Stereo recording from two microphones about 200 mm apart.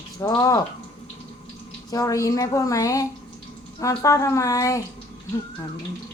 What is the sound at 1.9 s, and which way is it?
A woman's voice, 15° left (ahead or behind).